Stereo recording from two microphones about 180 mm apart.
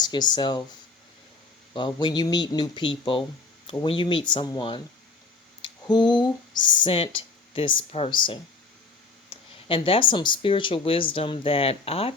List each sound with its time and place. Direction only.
0.0 s speech: 25° left (ahead or behind)
1.7 s speech: 25° left (ahead or behind)